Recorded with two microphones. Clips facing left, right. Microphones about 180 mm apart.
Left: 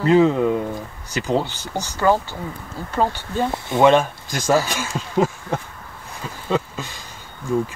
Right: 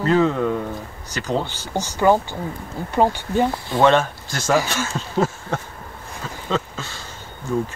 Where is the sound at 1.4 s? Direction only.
15° right (ahead or behind).